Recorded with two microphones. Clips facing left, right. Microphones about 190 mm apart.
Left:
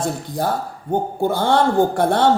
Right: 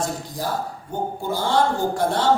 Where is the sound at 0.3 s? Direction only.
60° left (ahead or behind).